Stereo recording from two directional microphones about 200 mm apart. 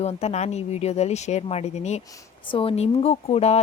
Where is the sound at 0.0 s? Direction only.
30° left (ahead or behind).